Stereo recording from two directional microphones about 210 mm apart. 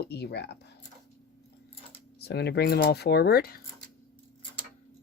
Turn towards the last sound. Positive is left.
turn(degrees=45)  # may be behind; listen again after turning